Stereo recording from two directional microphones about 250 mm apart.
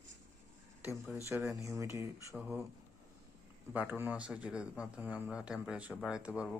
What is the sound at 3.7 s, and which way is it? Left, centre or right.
Speech, centre.